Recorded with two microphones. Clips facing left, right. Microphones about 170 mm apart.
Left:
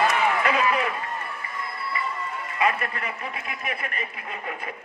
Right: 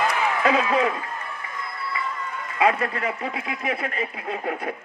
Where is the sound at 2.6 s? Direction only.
90° right.